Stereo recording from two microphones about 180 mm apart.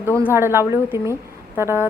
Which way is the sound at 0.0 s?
15° left (ahead or behind).